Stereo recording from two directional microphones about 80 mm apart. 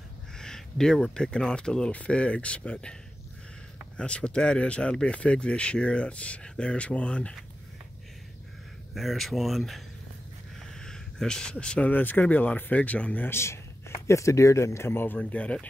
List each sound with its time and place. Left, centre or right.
0.4 s speech: centre
8.9 s speech: centre
10.7 s a sound: centre
11.6 s speech: centre
13.4 s speech: left; by 15.6 s centre